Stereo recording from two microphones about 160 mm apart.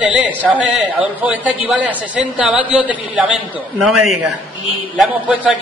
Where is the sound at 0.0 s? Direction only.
10° right (ahead or behind).